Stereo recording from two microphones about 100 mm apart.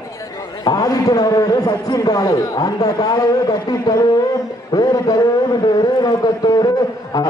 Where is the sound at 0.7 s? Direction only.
40° left (ahead or behind).